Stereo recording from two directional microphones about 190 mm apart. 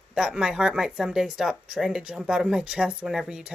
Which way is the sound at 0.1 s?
5° right (ahead or behind).